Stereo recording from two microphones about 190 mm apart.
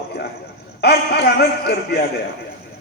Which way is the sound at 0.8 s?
55° left (ahead or behind).